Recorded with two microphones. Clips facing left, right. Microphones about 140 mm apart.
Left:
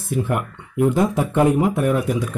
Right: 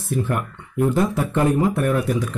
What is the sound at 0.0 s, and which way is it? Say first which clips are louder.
Speech: left 1 dB; 15° left (ahead or behind).